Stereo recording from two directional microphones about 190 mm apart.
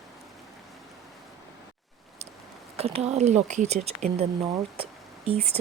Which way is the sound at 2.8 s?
35° right (ahead or behind).